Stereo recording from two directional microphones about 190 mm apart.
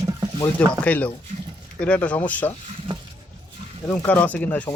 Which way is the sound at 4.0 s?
10° left (ahead or behind).